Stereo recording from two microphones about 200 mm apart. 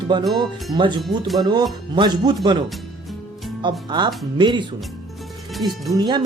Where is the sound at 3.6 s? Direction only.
20° right (ahead or behind).